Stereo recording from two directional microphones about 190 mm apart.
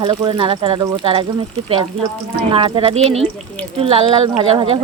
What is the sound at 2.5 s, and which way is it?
Speech, 30° right (ahead or behind).